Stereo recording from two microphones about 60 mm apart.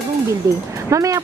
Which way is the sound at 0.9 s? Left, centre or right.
Right.